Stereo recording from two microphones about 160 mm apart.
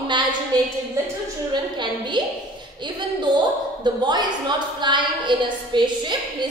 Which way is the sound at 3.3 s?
30° right (ahead or behind).